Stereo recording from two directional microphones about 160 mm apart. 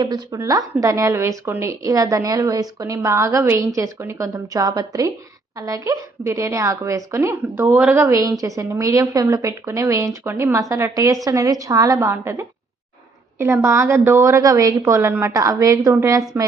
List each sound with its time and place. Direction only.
0.0 s a woman's voice: 25° right (ahead or behind)